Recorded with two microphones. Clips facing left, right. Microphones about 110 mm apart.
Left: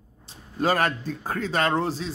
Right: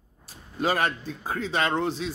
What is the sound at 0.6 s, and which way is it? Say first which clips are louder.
Speech: left 2 dB; 45° left (ahead or behind).